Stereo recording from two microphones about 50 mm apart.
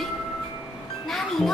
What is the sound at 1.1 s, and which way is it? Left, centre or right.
Music, centre.